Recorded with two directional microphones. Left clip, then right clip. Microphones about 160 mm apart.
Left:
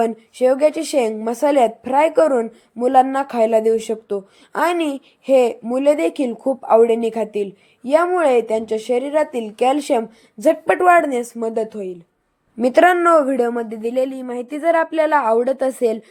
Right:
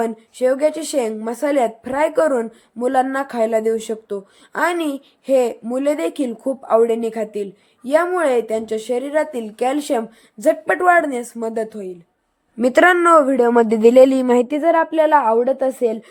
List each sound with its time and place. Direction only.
0.0 s speech: 10° left (ahead or behind)
12.6 s a woman's voice: 10° right (ahead or behind)
13.5 s speech: 55° right (ahead or behind)
14.6 s a woman's voice: 15° right (ahead or behind)